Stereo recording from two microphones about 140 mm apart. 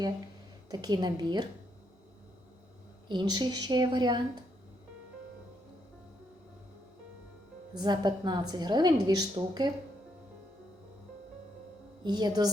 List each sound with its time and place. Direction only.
0.7 s a woman's voice: 25° right (ahead or behind)
3.1 s a woman's voice: 30° right (ahead or behind)
7.7 s a woman's voice: 30° right (ahead or behind)
12.0 s a woman's voice: 30° right (ahead or behind)